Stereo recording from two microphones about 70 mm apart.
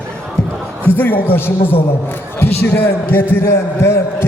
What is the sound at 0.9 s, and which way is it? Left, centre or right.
A man's voice, left.